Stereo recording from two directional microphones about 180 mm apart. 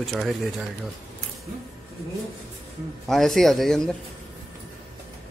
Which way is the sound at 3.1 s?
Centre (ahead or behind).